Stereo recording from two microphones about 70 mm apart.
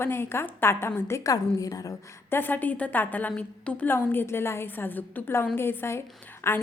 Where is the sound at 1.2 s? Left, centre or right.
Left.